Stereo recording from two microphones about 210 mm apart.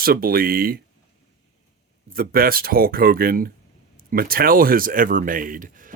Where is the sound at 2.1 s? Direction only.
45° right (ahead or behind).